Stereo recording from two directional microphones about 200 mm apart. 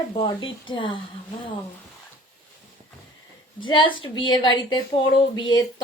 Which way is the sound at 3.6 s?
25° left (ahead or behind).